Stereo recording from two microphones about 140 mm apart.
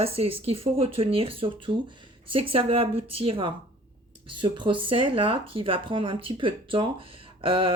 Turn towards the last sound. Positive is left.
turn(degrees=-40)  # may be behind; listen again after turning